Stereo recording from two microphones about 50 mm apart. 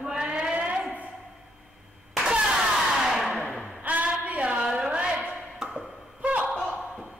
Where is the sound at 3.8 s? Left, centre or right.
Right.